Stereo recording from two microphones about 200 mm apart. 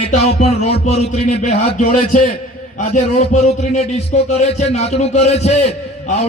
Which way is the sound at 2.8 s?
40° left (ahead or behind).